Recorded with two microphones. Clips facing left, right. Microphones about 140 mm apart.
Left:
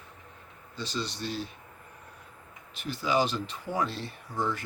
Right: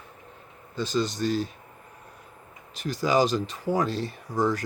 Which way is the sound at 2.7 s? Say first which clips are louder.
Right 4 dB; 40° right (ahead or behind).